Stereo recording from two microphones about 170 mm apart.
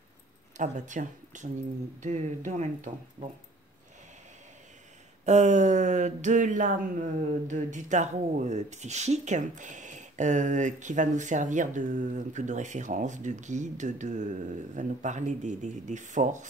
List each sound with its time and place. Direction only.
0.6 s speech: 45° right (ahead or behind)
5.2 s speech: 45° right (ahead or behind)